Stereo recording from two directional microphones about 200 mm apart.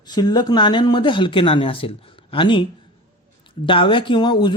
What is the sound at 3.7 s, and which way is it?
Speech, 25° left (ahead or behind).